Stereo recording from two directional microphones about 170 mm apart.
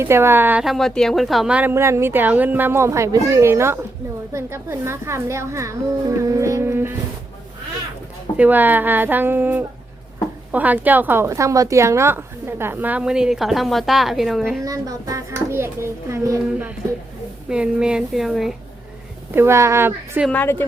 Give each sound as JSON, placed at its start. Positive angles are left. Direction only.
{"t": 0.0, "sound": "a woman's voice", "side_deg": -15}
{"t": 8.4, "sound": "a woman's voice", "side_deg": -10}
{"t": 14.6, "sound": "a woman's voice", "side_deg": -20}
{"t": 19.3, "sound": "a woman's voice", "side_deg": -15}
{"t": 20.3, "sound": "speech", "side_deg": 10}